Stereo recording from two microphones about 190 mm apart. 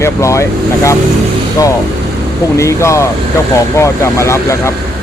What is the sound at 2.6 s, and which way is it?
Speech, 15° left (ahead or behind).